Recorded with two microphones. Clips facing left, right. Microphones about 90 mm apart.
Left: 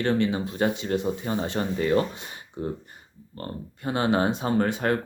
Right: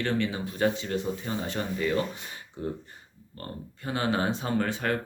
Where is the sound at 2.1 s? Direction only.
25° left (ahead or behind).